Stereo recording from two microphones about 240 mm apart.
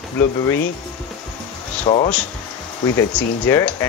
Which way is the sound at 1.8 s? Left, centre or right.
Left.